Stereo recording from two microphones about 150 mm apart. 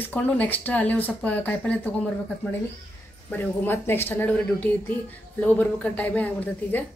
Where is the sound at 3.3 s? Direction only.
15° left (ahead or behind).